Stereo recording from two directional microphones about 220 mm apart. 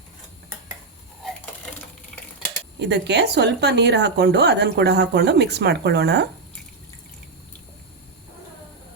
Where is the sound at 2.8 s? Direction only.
50° right (ahead or behind).